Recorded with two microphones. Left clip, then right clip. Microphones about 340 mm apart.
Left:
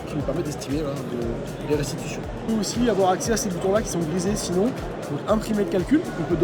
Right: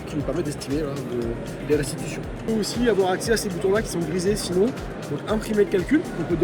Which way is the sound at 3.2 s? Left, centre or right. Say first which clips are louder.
Right 2 dB; left.